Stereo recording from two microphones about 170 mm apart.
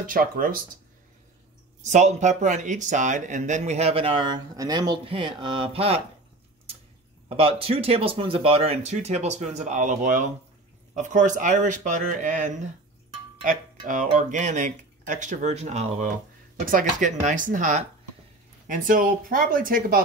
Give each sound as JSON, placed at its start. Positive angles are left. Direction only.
{"t": 0.0, "sound": "speech", "side_deg": -55}
{"t": 1.8, "sound": "speech", "side_deg": -45}
{"t": 7.2, "sound": "speech", "side_deg": -35}
{"t": 13.8, "sound": "speech", "side_deg": -50}